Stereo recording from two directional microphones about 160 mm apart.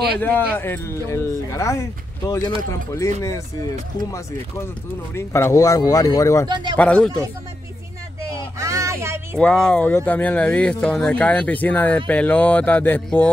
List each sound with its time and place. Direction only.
0.2 s speech: 15° left (ahead or behind)
5.1 s speech: 15° left (ahead or behind)
6.5 s speech: 30° right (ahead or behind)
6.8 s speech: 5° left (ahead or behind)
8.5 s a sound: 20° right (ahead or behind)
9.4 s speech: 5° left (ahead or behind)